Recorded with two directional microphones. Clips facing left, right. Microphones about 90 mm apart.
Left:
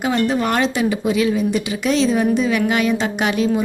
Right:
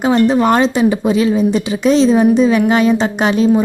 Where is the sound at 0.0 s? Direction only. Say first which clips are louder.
Right 7 dB; 30° right (ahead or behind).